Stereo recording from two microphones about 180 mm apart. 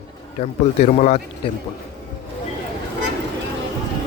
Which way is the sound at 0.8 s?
40° left (ahead or behind).